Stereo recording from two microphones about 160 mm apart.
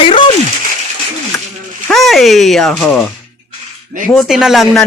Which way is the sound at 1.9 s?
Centre (ahead or behind).